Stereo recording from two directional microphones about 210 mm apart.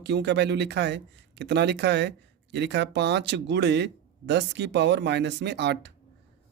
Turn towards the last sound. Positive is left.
turn(degrees=-55)  # may be behind; listen again after turning